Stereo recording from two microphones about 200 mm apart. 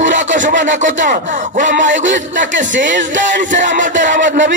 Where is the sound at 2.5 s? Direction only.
65° right (ahead or behind).